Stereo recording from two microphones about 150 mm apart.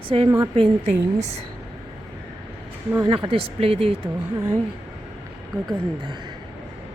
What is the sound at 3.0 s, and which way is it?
Speech, 35° right (ahead or behind).